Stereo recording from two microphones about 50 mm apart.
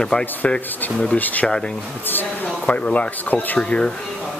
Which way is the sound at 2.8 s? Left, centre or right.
Left.